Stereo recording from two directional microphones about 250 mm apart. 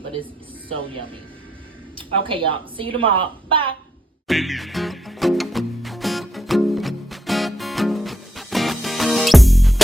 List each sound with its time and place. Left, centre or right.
2.0 s a woman's voice: right
4.3 s music: centre